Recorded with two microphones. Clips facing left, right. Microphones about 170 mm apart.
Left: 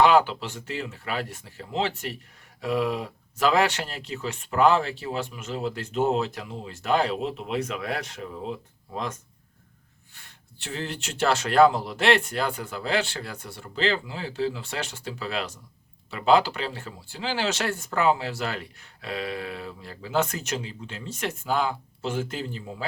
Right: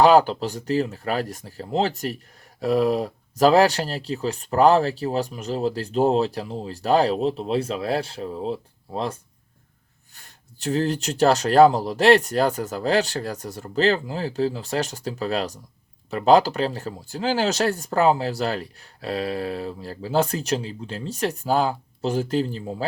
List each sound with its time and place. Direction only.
0.0 s speech: 35° right (ahead or behind)
10.2 s speech: 40° right (ahead or behind)